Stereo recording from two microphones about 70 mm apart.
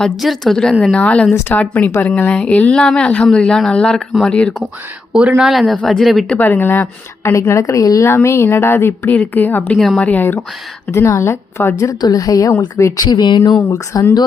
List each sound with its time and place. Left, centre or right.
0.2 s speech: centre
0.9 s speech: centre
5.4 s speech: centre
6.4 s speech: left
7.3 s speech: left
7.6 s a woman's voice: left
8.0 s speech: left
9.1 s speech: left
9.7 s speech: centre
10.0 s speech: left
10.9 s speech: left
11.9 s a woman's voice: left
13.1 s speech: left
13.7 s speech: left